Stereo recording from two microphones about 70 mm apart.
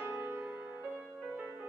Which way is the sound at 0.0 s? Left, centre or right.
Right.